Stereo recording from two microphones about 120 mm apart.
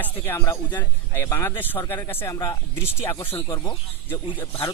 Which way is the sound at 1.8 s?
30° left (ahead or behind).